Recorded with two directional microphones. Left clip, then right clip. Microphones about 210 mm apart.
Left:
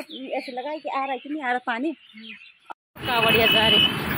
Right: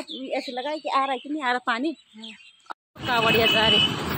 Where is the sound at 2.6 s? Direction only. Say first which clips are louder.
Even; centre (ahead or behind).